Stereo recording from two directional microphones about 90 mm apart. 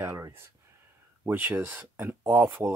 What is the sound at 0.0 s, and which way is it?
Speech, 30° right (ahead or behind).